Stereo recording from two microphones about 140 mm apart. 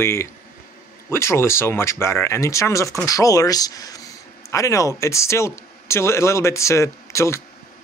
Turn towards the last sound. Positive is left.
turn(degrees=20)  # may be behind; listen again after turning